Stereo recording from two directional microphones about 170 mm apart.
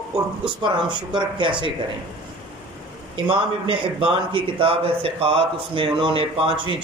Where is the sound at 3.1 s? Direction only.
30° right (ahead or behind).